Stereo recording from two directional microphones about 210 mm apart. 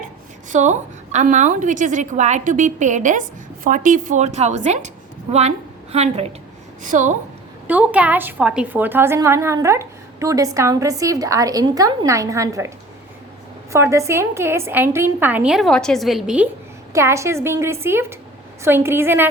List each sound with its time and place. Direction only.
0.5 s a woman's voice: 35° right (ahead or behind)
7.7 s a woman's voice: 5° right (ahead or behind)
13.7 s a woman's voice: 15° right (ahead or behind)